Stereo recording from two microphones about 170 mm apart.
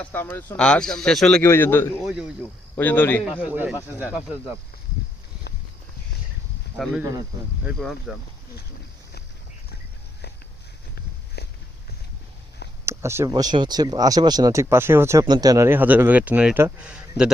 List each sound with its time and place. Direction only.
0.0 s speech: 10° left (ahead or behind)
1.4 s a man's voice: 15° left (ahead or behind)
2.0 s speech: 5° right (ahead or behind)
2.7 s a man's voice: 10° left (ahead or behind)
3.4 s speech: 10° right (ahead or behind)
7.6 s speech: centre (ahead or behind)
11.4 s a sound: 75° left (ahead or behind)
12.8 s speech: 15° right (ahead or behind)